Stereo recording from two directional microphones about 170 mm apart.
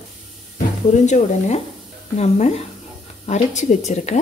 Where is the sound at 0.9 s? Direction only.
45° left (ahead or behind).